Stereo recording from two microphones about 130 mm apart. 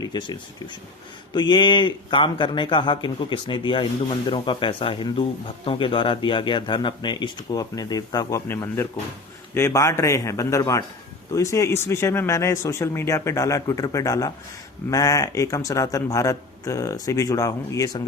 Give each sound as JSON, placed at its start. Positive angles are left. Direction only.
{"t": 0.0, "sound": "a man's voice", "side_deg": 35}